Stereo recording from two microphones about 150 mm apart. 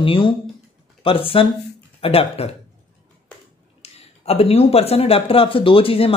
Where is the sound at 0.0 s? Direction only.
35° left (ahead or behind).